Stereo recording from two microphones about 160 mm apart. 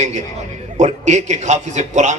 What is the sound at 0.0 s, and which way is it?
A man's voice, 45° right (ahead or behind).